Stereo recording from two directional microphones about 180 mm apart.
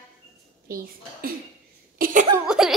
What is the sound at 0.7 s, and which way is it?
Speech, 55° right (ahead or behind).